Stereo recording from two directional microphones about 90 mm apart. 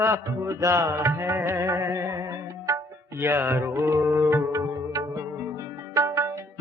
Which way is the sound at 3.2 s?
25° right (ahead or behind).